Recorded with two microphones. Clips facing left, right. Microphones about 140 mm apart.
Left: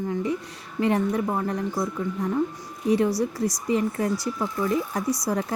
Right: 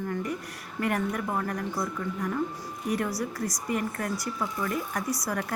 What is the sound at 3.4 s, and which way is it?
Speech, 90° left.